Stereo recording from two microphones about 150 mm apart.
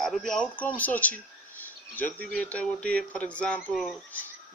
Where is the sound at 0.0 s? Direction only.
5° left (ahead or behind).